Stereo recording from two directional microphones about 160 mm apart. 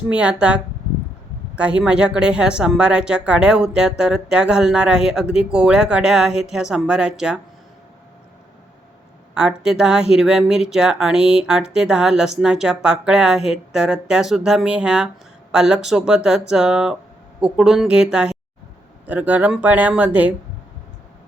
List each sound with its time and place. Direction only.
0.1 s a woman's voice: 5° right (ahead or behind)
9.3 s a woman's voice: 5° right (ahead or behind)